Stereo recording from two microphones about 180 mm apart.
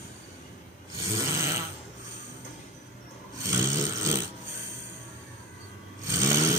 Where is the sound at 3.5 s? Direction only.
15° right (ahead or behind).